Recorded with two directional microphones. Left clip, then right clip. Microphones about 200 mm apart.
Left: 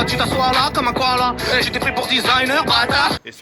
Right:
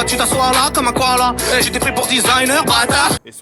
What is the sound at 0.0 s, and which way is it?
Speech, 50° right (ahead or behind).